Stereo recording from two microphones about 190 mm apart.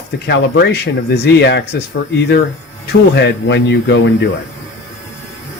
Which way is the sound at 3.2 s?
65° left (ahead or behind).